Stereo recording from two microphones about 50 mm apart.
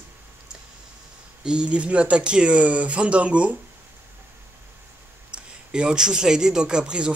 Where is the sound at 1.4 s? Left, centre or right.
Centre.